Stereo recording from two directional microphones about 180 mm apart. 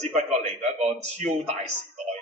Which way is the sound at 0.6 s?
40° right (ahead or behind).